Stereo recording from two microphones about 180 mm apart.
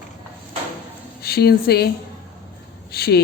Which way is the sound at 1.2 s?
60° left (ahead or behind).